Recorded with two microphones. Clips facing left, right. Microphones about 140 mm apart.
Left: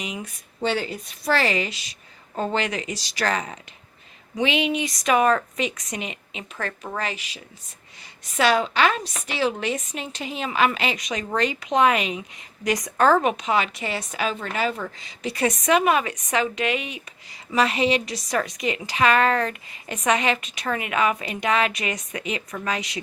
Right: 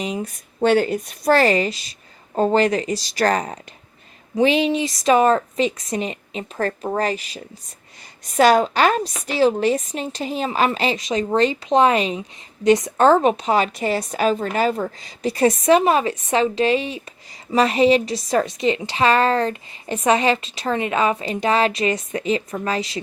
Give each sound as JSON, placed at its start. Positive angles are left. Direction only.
{"t": 0.0, "sound": "a woman's voice", "side_deg": -35}
{"t": 0.6, "sound": "a woman's voice", "side_deg": -55}